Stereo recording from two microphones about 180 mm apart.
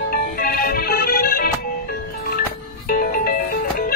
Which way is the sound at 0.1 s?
55° left (ahead or behind).